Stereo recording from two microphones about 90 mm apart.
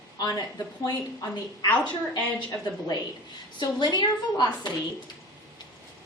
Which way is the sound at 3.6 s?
50° left (ahead or behind).